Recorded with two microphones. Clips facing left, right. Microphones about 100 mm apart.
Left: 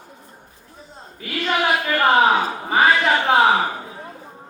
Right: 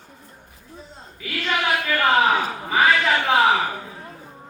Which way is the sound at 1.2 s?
35° left (ahead or behind).